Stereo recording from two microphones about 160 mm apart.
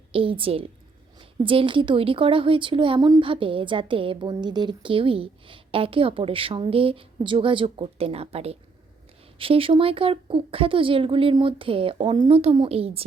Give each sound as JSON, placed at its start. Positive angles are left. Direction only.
{"t": 0.1, "sound": "a woman's voice", "side_deg": -35}